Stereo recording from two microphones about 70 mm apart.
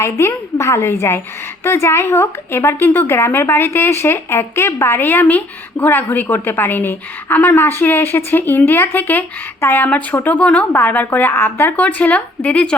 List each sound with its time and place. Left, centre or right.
0.0 s a woman's voice: left; by 12.7 s centre